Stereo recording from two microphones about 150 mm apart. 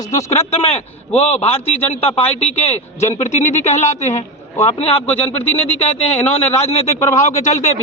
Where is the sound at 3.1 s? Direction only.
45° left (ahead or behind).